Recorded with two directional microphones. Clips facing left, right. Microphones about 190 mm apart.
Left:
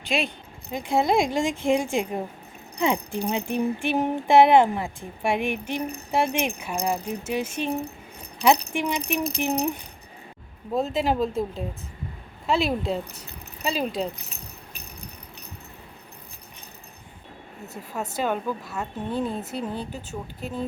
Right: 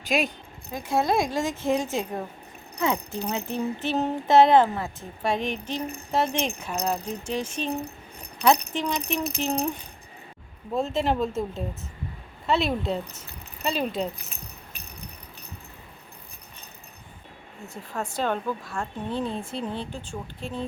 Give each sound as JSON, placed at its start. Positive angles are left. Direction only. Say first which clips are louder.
{"t": 0.7, "sound": "speech", "louder": "left 2 dB", "side_deg": 15}
{"t": 10.8, "sound": "a woman's voice", "louder": "even", "side_deg": 5}
{"t": 17.8, "sound": "a woman's voice", "louder": "left 1 dB", "side_deg": 5}